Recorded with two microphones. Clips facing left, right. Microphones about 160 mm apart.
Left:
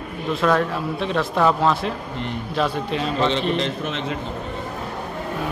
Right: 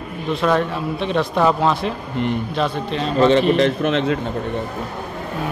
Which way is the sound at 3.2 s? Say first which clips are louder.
Right 9 dB; 50° right (ahead or behind).